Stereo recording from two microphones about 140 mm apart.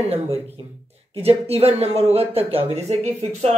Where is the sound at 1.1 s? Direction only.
45° right (ahead or behind).